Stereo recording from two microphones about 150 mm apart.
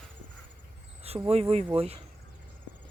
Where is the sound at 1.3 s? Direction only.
40° right (ahead or behind).